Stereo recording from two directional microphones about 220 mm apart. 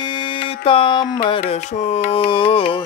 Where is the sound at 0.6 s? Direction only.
20° left (ahead or behind).